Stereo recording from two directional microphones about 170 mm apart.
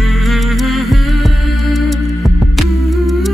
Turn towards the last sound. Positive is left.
turn(degrees=0)  # may be behind; listen again after turning